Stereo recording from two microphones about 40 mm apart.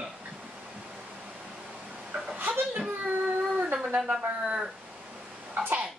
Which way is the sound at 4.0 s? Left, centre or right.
Right.